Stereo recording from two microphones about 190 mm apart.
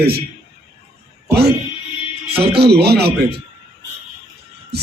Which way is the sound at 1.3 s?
55° right (ahead or behind).